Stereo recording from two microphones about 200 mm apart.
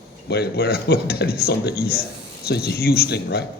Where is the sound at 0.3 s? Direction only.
50° left (ahead or behind).